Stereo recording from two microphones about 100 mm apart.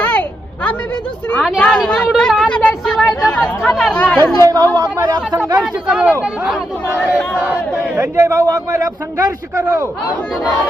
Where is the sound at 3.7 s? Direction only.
5° left (ahead or behind).